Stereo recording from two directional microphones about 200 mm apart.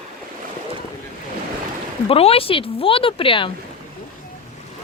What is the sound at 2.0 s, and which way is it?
Speech, 30° left (ahead or behind).